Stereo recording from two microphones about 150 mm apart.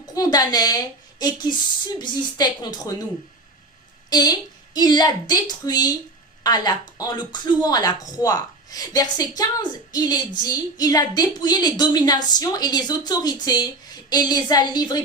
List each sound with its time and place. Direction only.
0.0 s a woman's voice: 25° left (ahead or behind)
4.1 s a woman's voice: 25° left (ahead or behind)